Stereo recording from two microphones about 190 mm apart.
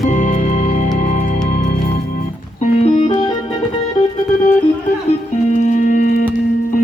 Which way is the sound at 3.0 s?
25° left (ahead or behind).